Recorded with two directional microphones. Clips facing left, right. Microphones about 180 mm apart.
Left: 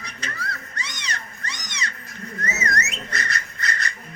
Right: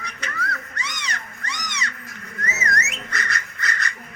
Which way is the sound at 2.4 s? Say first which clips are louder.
Even; 35° left (ahead or behind).